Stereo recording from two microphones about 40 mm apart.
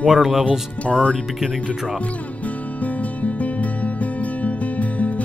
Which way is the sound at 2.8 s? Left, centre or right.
Left.